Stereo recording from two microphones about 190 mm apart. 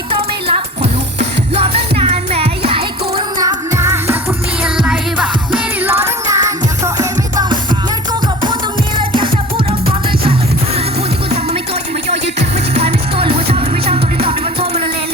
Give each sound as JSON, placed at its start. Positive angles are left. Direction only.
{"t": 0.4, "sound": "music", "side_deg": -30}
{"t": 3.4, "sound": "music", "side_deg": -15}
{"t": 9.0, "sound": "music", "side_deg": -25}
{"t": 12.7, "sound": "music", "side_deg": -30}